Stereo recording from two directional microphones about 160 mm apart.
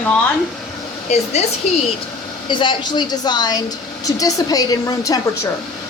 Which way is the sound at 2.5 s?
30° left (ahead or behind).